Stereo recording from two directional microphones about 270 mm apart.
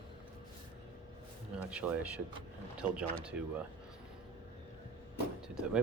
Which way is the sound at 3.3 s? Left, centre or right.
Centre.